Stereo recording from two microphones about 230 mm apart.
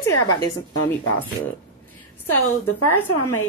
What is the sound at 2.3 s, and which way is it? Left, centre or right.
Speech, left.